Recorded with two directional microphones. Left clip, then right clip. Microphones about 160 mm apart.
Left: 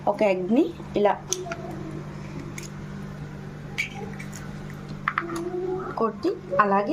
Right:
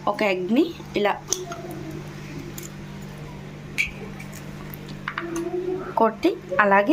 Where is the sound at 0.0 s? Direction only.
15° left (ahead or behind).